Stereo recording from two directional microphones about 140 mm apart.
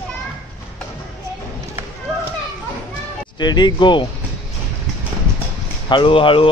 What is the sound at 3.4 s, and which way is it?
Speech, 30° left (ahead or behind).